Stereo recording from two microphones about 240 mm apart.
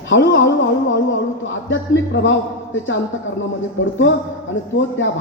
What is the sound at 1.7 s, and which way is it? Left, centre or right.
Speech, left.